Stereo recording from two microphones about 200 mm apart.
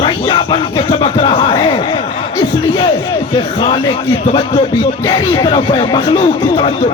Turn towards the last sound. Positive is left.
turn(degrees=25)  # may be behind; listen again after turning